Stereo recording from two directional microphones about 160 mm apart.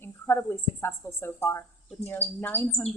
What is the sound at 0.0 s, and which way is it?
A woman's voice, 15° left (ahead or behind).